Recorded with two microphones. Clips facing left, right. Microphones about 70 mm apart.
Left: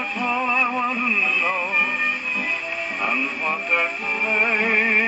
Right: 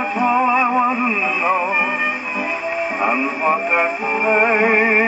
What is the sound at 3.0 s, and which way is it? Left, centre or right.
Music, right.